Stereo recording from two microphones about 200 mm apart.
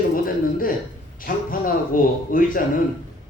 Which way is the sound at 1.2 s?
45° left (ahead or behind).